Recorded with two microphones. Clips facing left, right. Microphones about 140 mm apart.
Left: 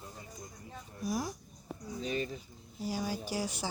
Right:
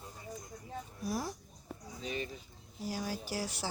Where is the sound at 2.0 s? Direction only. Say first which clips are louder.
Left 4 dB; 35° left (ahead or behind).